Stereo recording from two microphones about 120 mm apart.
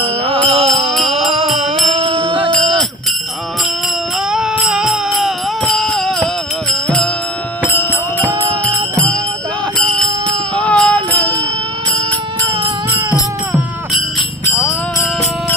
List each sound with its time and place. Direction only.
0.0 s music: 50° right (ahead or behind)
4.3 s a sound: 5° right (ahead or behind)
7.6 s music: 20° left (ahead or behind)
10.5 s music: 10° left (ahead or behind)